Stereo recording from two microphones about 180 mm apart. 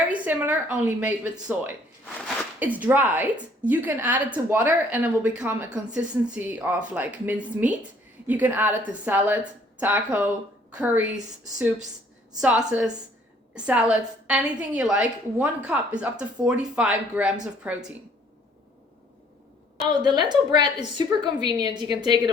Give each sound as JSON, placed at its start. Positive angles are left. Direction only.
{"t": 0.1, "sound": "a woman's voice", "side_deg": -10}
{"t": 19.9, "sound": "a woman's voice", "side_deg": -25}